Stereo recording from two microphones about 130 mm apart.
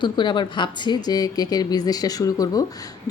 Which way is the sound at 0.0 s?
35° left (ahead or behind).